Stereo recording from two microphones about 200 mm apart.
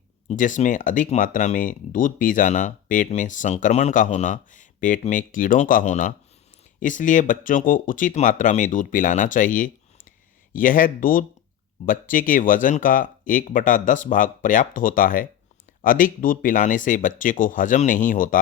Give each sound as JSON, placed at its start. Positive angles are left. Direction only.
{"t": 0.3, "sound": "speech", "side_deg": 40}